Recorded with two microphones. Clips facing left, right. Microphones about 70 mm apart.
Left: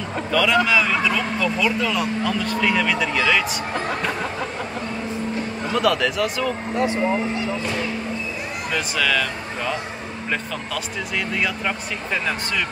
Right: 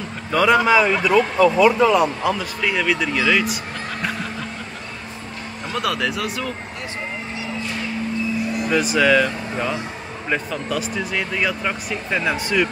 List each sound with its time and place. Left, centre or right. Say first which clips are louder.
0.3 s a man's voice: right 3 dB; right
2.2 s speech: even; centre
5.7 s speech: left 3 dB; centre
8.6 s speech: right 5 dB; centre
11.0 s speech: right 1 dB; centre